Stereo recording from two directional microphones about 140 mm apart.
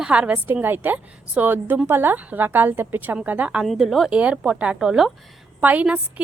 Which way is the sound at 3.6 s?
Centre (ahead or behind).